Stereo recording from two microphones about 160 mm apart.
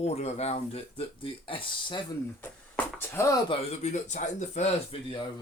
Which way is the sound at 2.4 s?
15° left (ahead or behind).